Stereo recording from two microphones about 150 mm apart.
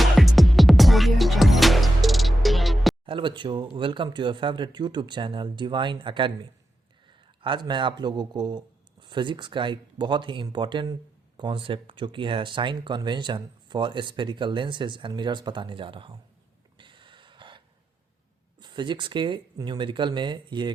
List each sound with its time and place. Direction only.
0.0 s music: centre (ahead or behind)
3.1 s a man's voice: 35° right (ahead or behind)
16.7 s a sound: 35° right (ahead or behind)
18.6 s speech: 30° right (ahead or behind)